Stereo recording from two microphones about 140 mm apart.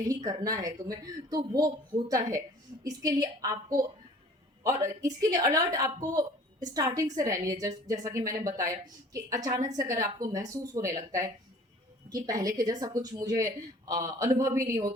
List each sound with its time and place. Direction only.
0.0 s speech: 25° right (ahead or behind)